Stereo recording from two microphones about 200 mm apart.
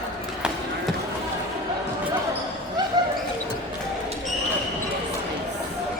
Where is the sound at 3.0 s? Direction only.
20° right (ahead or behind).